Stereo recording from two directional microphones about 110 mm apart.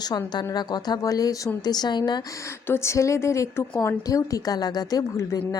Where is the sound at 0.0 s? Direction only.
40° left (ahead or behind).